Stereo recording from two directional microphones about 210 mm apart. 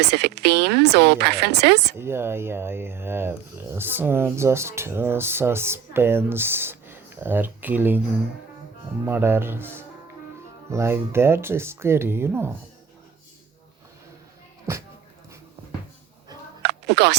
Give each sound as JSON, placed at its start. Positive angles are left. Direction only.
{"t": 0.0, "sound": "speech", "side_deg": -50}
{"t": 2.0, "sound": "speech", "side_deg": -10}
{"t": 9.0, "sound": "speech", "side_deg": -10}
{"t": 16.6, "sound": "a sound", "side_deg": -50}